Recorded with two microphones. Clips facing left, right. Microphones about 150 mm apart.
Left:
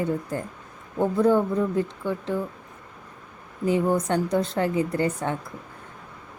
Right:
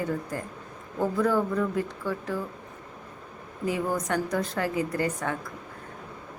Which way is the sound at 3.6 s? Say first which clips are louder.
Left 6 dB; 25° left (ahead or behind).